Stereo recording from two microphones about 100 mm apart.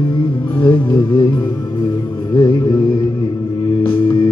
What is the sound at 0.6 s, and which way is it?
Music, 50° left (ahead or behind).